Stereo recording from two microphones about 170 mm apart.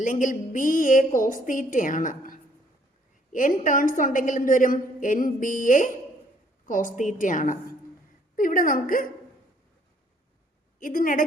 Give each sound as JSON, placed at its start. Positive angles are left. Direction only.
{"t": 0.0, "sound": "a woman's voice", "side_deg": 50}
{"t": 10.8, "sound": "a woman's voice", "side_deg": 55}